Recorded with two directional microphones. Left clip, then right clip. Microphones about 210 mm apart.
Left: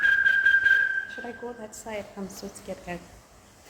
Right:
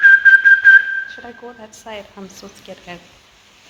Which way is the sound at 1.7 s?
5° right (ahead or behind).